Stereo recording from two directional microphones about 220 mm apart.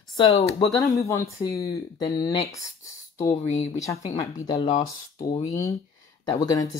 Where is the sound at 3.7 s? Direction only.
15° left (ahead or behind).